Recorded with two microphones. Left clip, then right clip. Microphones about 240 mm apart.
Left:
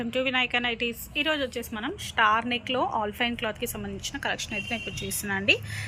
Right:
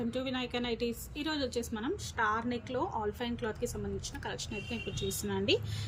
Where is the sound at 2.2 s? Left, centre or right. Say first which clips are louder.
Left 10 dB; left.